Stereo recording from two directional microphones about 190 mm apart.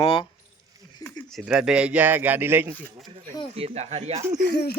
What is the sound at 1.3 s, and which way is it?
Speech, 5° right (ahead or behind).